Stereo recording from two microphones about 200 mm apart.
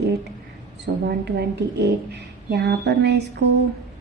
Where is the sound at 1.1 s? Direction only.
55° right (ahead or behind).